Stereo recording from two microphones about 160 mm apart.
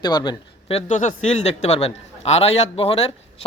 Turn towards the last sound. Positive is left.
turn(degrees=35)  # may be behind; listen again after turning